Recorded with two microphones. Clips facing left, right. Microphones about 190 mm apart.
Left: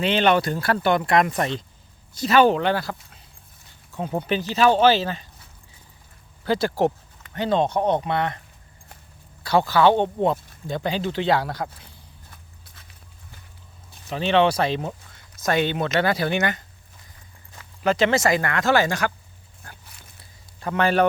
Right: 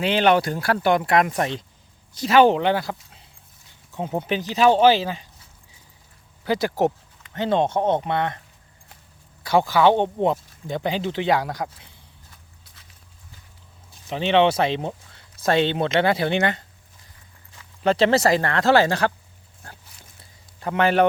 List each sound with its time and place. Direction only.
0.0 s speech: 10° right (ahead or behind)
3.9 s speech: 20° right (ahead or behind)
6.4 s speech: 15° right (ahead or behind)
9.4 s speech: 15° right (ahead or behind)
10.3 s a sound: 60° left (ahead or behind)
10.7 s speech: 20° right (ahead or behind)
12.3 s horse: 55° left (ahead or behind)
14.1 s speech: 20° right (ahead or behind)
17.8 s speech: 35° right (ahead or behind)
19.8 s a sound: 60° left (ahead or behind)
20.6 s speech: 20° right (ahead or behind)